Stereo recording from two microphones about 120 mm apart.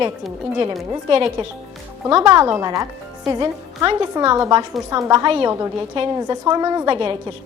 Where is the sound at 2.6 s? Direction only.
30° right (ahead or behind).